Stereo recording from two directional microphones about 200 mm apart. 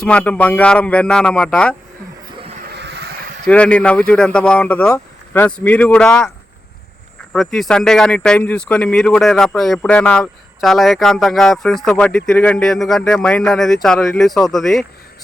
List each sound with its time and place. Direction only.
0.0 s speech: 5° left (ahead or behind)
2.6 s vehicle: 60° right (ahead or behind)
3.4 s speech: 5° left (ahead or behind)
7.3 s speech: centre (ahead or behind)